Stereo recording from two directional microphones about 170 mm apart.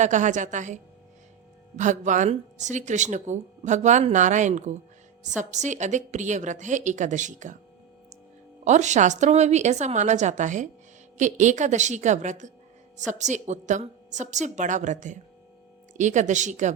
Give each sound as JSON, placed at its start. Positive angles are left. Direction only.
{"t": 0.0, "sound": "speech", "side_deg": -45}
{"t": 8.6, "sound": "speech", "side_deg": -45}